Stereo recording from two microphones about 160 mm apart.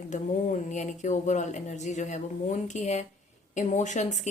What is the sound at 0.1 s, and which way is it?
Speech, 50° left (ahead or behind).